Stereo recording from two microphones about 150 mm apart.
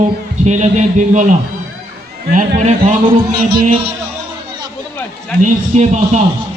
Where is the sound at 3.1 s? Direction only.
35° right (ahead or behind).